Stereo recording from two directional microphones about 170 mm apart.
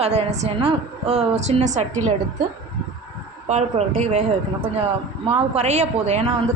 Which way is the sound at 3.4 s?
40° right (ahead or behind).